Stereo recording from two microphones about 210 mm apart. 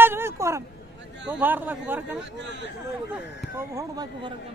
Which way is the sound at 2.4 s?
60° right (ahead or behind).